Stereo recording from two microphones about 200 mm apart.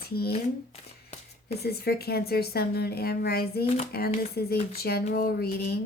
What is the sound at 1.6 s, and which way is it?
Speech, 50° left (ahead or behind).